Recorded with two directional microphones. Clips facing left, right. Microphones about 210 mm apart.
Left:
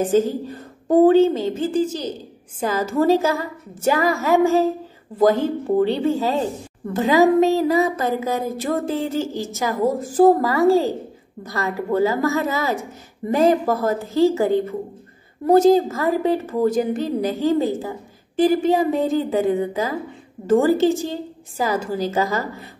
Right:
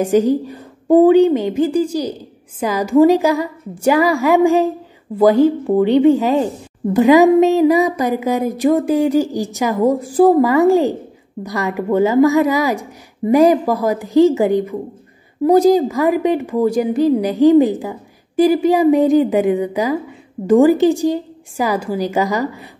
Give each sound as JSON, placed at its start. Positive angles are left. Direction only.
{"t": 0.1, "sound": "a woman's voice", "side_deg": -15}